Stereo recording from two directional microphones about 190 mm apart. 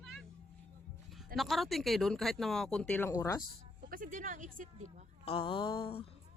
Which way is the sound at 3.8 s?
50° right (ahead or behind).